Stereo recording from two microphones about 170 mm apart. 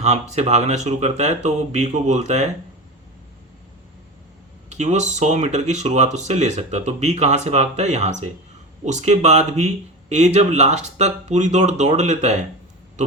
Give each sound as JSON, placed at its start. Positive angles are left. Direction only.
{"t": 0.0, "sound": "speech", "side_deg": -40}
{"t": 4.7, "sound": "speech", "side_deg": -45}